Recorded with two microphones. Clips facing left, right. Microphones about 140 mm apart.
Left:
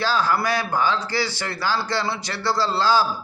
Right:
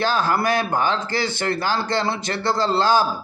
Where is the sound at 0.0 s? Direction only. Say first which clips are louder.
Right 1 dB; 50° right (ahead or behind).